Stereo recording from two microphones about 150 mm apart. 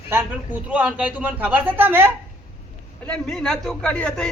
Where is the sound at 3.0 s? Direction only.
5° left (ahead or behind).